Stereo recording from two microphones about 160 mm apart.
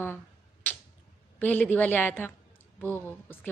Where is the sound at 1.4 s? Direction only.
10° left (ahead or behind).